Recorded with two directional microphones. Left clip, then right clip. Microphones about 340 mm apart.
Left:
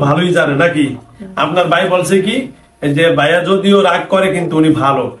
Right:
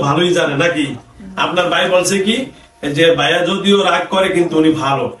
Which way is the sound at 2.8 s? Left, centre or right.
Centre.